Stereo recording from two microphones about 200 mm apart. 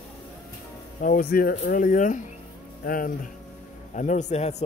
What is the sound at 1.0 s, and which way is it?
A man's voice, 45° left (ahead or behind).